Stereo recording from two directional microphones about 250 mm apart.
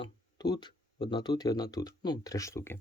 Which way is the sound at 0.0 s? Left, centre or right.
Centre.